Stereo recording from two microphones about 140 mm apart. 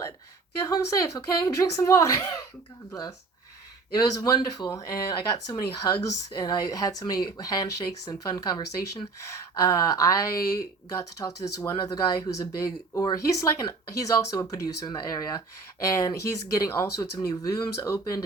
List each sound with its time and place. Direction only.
0.6 s speech: 20° left (ahead or behind)